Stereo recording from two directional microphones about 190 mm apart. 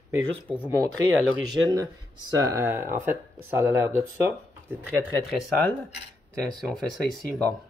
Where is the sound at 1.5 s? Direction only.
20° right (ahead or behind).